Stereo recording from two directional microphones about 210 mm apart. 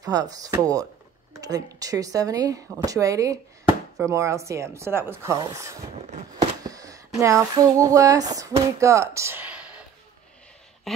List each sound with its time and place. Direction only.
0.0 s speech: 15° right (ahead or behind)